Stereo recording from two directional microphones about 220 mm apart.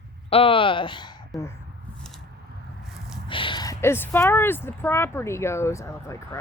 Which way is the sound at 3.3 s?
20° left (ahead or behind).